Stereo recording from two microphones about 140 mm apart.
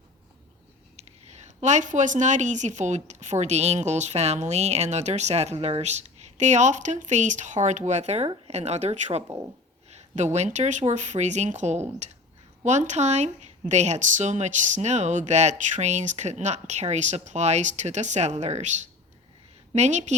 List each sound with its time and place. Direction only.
0.9 s speech: 55° right (ahead or behind)
9.2 s speech: 20° right (ahead or behind)
9.9 s a sound: 55° right (ahead or behind)
10.3 s speech: 55° right (ahead or behind)